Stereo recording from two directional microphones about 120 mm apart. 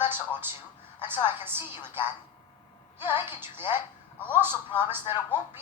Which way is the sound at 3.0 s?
15° right (ahead or behind).